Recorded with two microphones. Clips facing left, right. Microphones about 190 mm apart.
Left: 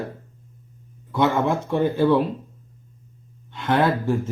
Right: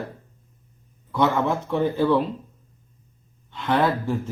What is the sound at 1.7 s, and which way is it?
Speech, centre (ahead or behind).